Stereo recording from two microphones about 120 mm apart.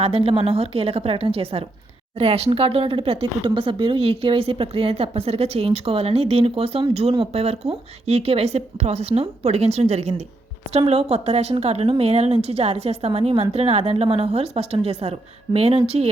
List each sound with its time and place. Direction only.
0.0 s a woman's voice: 55° right (ahead or behind)